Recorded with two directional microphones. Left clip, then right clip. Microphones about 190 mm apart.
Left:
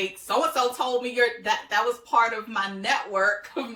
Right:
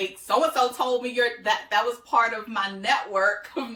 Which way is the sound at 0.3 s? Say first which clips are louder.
Right 2 dB; 15° left (ahead or behind).